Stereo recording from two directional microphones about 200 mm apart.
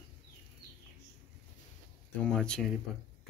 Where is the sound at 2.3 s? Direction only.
5° left (ahead or behind).